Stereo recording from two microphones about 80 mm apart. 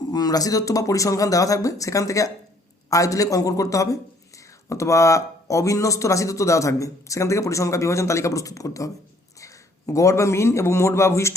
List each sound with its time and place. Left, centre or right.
0.1 s a man's voice: left